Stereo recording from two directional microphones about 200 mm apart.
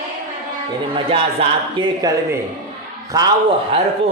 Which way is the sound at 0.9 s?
25° right (ahead or behind).